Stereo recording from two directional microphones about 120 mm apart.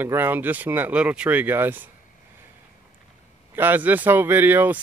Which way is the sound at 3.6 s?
15° right (ahead or behind).